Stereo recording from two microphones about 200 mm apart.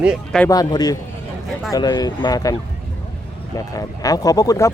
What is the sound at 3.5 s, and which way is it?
Speech, 15° left (ahead or behind).